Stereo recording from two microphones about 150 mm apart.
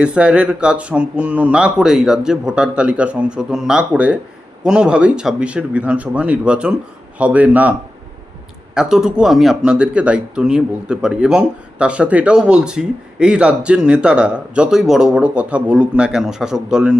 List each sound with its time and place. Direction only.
0.0 s speech: 5° right (ahead or behind)
8.7 s speech: 5° right (ahead or behind)